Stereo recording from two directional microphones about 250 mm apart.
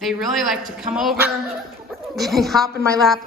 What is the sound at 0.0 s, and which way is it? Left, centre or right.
A woman's voice, centre.